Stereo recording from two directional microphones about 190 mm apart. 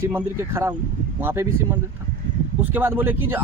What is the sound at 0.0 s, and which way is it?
Speech, 10° right (ahead or behind).